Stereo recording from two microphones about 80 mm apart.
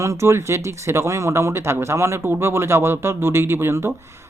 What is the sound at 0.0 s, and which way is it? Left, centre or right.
Speech, right.